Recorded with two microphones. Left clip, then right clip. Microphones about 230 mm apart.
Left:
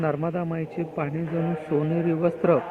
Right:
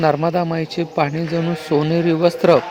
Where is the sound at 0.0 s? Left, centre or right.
Right.